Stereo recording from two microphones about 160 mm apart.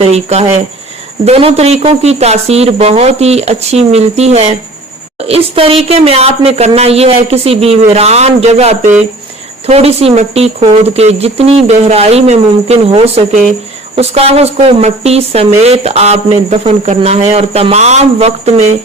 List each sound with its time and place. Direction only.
0.0 s a woman's voice: 40° right (ahead or behind)